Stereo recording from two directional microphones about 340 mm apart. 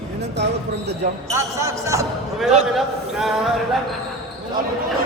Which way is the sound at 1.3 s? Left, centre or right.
Centre.